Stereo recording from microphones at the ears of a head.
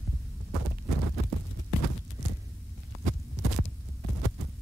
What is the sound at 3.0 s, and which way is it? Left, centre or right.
Hum, right.